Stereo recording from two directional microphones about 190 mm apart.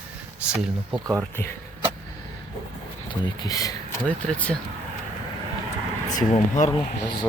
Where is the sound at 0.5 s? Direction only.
5° right (ahead or behind).